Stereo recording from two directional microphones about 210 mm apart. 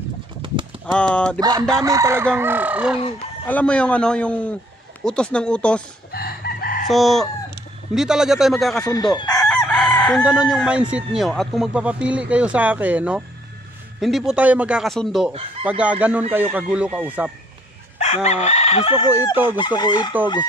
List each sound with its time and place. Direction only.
0.4 s pigeon: 25° right (ahead or behind)
0.9 s speech: 5° left (ahead or behind)
1.4 s speech: 20° right (ahead or behind)
3.4 s speech: 5° left (ahead or behind)
6.1 s chicken: 50° left (ahead or behind)
6.9 s speech: centre (ahead or behind)
8.8 s chicken: 20° left (ahead or behind)
9.4 s chicken: 5° left (ahead or behind)
10.2 s speech: 5° right (ahead or behind)
17.9 s chicken: 30° left (ahead or behind)
19.3 s speech: 10° right (ahead or behind)
19.6 s chicken: 20° left (ahead or behind)